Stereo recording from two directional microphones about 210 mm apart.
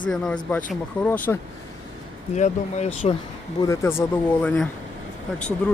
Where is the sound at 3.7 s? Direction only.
10° left (ahead or behind).